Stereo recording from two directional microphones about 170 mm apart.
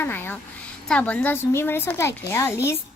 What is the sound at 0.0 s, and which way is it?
Speech, 10° left (ahead or behind).